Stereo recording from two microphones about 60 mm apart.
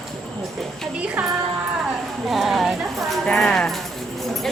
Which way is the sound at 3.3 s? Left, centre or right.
Centre.